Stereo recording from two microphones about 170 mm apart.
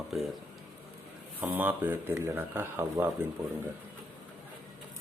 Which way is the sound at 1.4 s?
10° right (ahead or behind).